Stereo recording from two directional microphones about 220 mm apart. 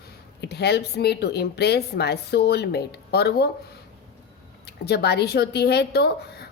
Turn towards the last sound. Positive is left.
turn(degrees=50)  # may be behind; listen again after turning